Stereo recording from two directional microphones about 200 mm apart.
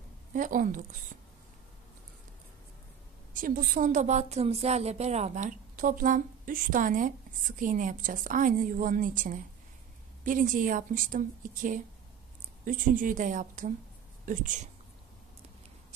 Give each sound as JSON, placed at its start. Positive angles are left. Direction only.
{"t": 0.3, "sound": "a woman's voice", "side_deg": -40}
{"t": 3.3, "sound": "a woman's voice", "side_deg": -45}